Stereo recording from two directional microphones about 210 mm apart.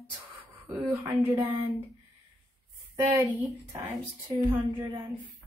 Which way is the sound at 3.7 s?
15° right (ahead or behind).